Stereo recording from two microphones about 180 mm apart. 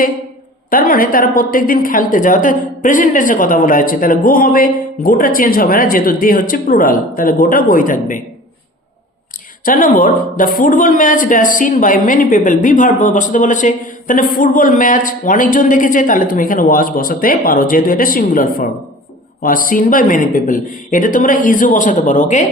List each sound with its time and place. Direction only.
0.7 s speech: 50° left (ahead or behind)
9.6 s speech: 50° left (ahead or behind)